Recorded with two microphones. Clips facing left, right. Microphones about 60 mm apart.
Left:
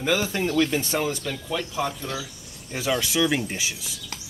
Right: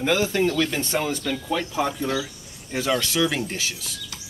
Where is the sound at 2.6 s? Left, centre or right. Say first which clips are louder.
Right 2 dB; centre.